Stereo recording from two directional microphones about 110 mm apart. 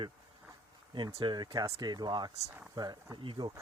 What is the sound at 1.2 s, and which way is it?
Speech, 45° right (ahead or behind).